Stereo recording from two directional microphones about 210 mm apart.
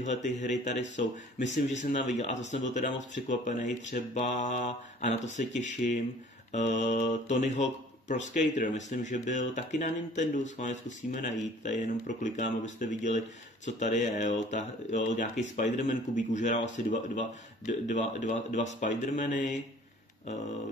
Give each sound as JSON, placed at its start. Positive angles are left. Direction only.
{"t": 0.1, "sound": "speech", "side_deg": 35}